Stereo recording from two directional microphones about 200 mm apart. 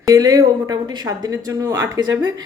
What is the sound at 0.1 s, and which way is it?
A woman's voice, 20° right (ahead or behind).